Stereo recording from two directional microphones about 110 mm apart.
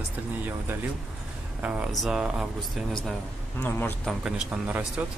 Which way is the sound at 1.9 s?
Centre (ahead or behind).